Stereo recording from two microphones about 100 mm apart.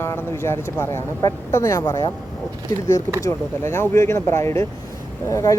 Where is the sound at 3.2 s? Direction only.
25° left (ahead or behind).